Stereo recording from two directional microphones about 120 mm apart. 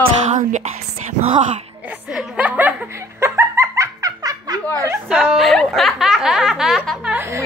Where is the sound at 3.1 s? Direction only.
20° right (ahead or behind).